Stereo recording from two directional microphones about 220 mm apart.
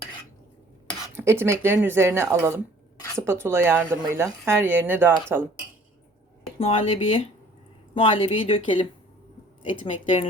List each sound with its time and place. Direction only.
1.1 s a woman's voice: 10° right (ahead or behind)
6.6 s speech: 25° left (ahead or behind)